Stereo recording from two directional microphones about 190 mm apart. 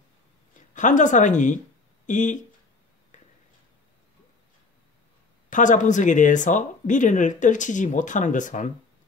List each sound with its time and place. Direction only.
0.7 s speech: 40° left (ahead or behind)
5.5 s speech: 40° left (ahead or behind)